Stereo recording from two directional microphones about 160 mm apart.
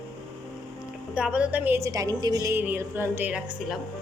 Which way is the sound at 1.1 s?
5° right (ahead or behind).